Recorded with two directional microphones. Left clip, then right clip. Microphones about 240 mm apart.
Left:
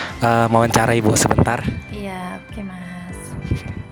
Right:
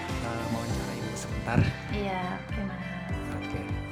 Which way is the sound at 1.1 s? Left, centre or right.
Left.